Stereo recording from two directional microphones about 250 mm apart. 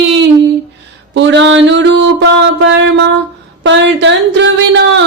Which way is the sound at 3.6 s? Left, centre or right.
Right.